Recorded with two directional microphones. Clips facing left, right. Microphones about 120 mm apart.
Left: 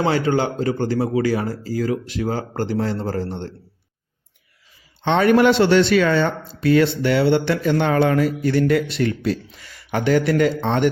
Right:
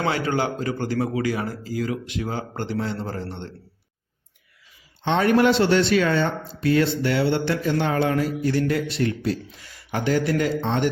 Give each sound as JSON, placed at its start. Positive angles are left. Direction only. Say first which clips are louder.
{"t": 0.0, "sound": "a man's voice", "louder": "left 4 dB", "side_deg": 30}
{"t": 5.0, "sound": "speech", "louder": "left 3 dB", "side_deg": 75}